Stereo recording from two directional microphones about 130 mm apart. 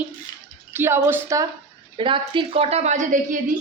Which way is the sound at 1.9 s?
40° right (ahead or behind).